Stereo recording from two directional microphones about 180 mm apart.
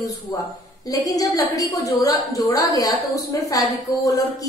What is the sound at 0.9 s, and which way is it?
A woman's voice, 20° left (ahead or behind).